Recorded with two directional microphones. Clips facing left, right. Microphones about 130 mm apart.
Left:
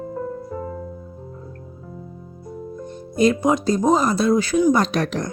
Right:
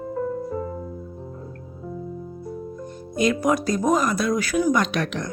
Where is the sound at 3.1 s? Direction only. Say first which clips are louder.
Left 3 dB; 30° left (ahead or behind).